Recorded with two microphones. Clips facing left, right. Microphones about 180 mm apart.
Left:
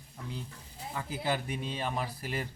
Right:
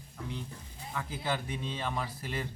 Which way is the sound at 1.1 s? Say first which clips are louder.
Left 3 dB; 10° left (ahead or behind).